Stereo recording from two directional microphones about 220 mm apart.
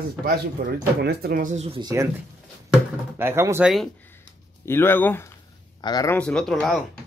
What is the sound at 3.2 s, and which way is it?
Speech, 10° right (ahead or behind).